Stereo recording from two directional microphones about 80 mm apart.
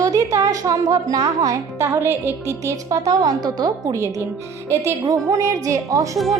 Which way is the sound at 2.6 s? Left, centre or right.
Right.